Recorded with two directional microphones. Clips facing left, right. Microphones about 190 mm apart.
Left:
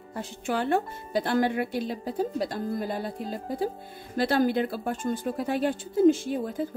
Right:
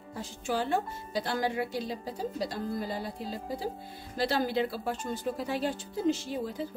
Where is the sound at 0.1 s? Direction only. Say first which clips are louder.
Left 3 dB; 60° left (ahead or behind).